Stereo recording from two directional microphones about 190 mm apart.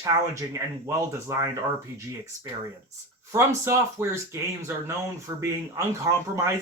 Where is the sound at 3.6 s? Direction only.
15° right (ahead or behind).